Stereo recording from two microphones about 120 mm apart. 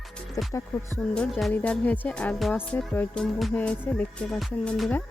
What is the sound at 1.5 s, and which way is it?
Music, 10° left (ahead or behind).